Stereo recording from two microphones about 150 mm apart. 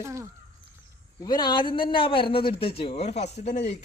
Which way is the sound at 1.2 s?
30° left (ahead or behind).